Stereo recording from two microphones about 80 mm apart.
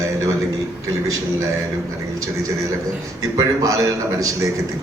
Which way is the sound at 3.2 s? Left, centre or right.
Right.